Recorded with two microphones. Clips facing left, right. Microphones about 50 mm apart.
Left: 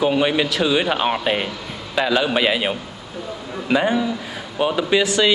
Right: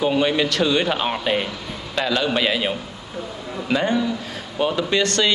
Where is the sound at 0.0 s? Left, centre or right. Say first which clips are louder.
Left 1 dB; centre.